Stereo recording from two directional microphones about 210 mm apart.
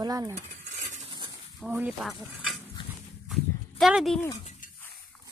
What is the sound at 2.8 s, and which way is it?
Horse, 25° left (ahead or behind).